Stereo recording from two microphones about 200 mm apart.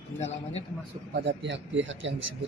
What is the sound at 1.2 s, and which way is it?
Speech, 60° right (ahead or behind).